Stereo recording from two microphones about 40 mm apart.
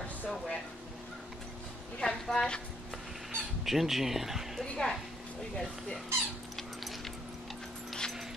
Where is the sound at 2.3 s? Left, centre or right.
Centre.